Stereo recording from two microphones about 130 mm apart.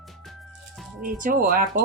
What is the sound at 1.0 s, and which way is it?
Speech, 90° right.